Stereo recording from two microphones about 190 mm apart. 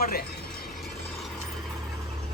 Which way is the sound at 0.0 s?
55° left (ahead or behind).